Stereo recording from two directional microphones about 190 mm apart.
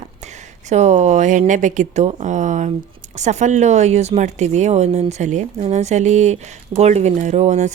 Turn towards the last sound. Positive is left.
turn(degrees=-40)  # may be behind; listen again after turning